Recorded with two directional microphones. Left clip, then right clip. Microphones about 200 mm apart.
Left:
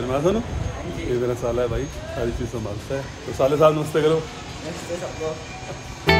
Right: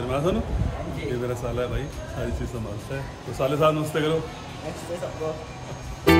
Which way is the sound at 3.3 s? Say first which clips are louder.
Left 5 dB; 5° right (ahead or behind).